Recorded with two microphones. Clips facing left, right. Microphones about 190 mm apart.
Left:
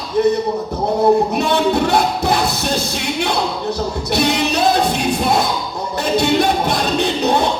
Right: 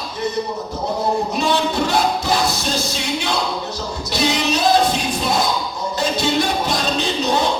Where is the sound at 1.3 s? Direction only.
60° left (ahead or behind).